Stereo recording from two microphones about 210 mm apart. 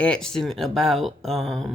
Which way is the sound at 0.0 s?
5° left (ahead or behind).